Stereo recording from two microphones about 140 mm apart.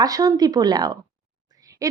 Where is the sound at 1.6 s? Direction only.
25° right (ahead or behind).